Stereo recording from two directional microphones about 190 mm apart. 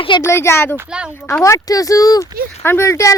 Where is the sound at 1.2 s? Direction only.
15° left (ahead or behind).